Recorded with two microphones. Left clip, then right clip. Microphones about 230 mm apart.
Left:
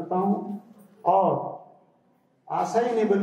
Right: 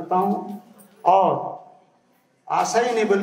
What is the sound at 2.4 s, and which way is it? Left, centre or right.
Speech, centre.